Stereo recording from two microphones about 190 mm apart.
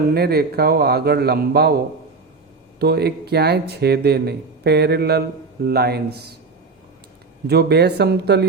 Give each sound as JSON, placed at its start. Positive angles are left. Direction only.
{"t": 0.1, "sound": "speech", "side_deg": -55}
{"t": 2.7, "sound": "speech", "side_deg": -60}
{"t": 7.4, "sound": "speech", "side_deg": -60}